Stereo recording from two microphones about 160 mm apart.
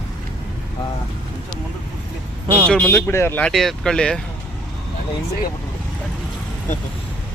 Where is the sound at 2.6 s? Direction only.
5° left (ahead or behind).